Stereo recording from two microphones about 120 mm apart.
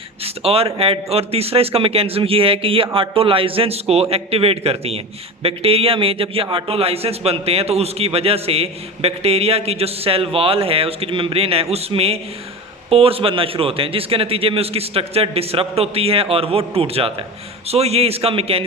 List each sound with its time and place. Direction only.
0.4 s a man's voice: 55° right (ahead or behind)